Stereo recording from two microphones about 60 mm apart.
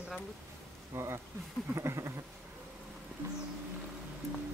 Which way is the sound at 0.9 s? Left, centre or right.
Right.